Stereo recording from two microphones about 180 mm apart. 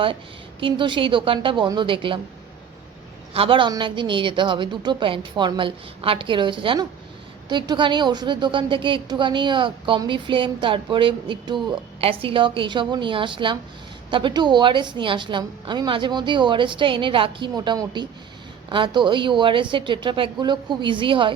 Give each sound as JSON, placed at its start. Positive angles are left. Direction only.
{"t": 0.6, "sound": "a woman's voice", "side_deg": -30}
{"t": 3.3, "sound": "a woman's voice", "side_deg": -30}